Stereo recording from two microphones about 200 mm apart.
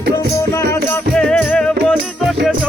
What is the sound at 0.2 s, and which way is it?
Music, 15° left (ahead or behind).